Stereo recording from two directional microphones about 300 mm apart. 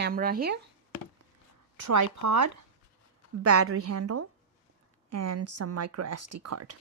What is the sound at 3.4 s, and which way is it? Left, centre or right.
A woman's voice, right.